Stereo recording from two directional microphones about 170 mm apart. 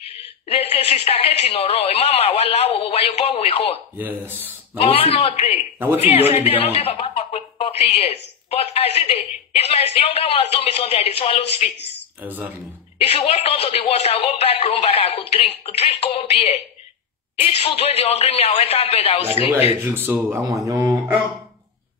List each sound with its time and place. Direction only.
0.5 s a woman's voice: 35° left (ahead or behind)
4.0 s speech: 10° right (ahead or behind)
4.7 s a woman's voice: 35° left (ahead or behind)
12.2 s speech: 10° right (ahead or behind)
13.2 s a woman's voice: 35° left (ahead or behind)
19.8 s speech: 10° right (ahead or behind)